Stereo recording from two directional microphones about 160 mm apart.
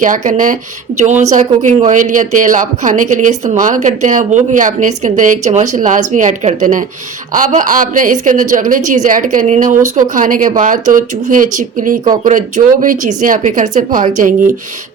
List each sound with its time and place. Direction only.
0.0 s a woman's voice: 55° right (ahead or behind)